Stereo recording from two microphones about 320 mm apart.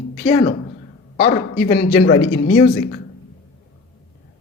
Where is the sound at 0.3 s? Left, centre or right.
Left.